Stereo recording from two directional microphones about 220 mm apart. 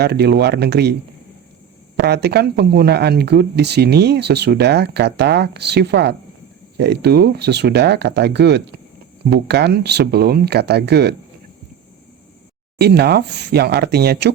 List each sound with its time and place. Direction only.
0.0 s speech: 50° right (ahead or behind)
2.0 s speech: 50° right (ahead or behind)
12.8 s speech: 45° right (ahead or behind)